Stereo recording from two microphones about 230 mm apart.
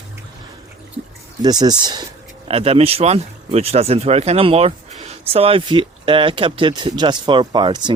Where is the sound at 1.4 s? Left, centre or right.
Centre.